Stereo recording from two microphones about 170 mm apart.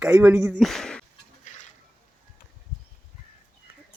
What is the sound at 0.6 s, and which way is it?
Speech, centre (ahead or behind).